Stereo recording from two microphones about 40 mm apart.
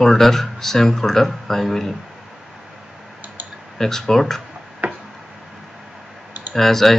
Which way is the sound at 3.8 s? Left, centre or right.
Centre.